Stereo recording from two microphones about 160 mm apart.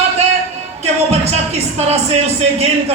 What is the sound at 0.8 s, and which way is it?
Speech, 40° right (ahead or behind).